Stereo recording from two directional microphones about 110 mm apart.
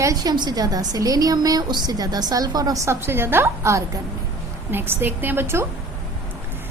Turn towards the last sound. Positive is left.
turn(degrees=-20)  # may be behind; listen again after turning